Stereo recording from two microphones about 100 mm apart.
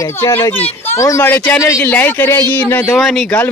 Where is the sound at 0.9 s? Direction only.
30° left (ahead or behind).